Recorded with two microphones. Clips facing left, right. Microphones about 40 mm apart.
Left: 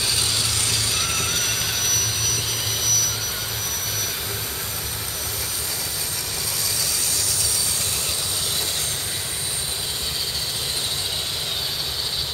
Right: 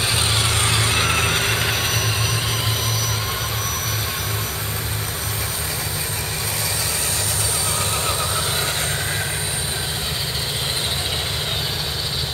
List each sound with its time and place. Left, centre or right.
0.0 s vehicle: right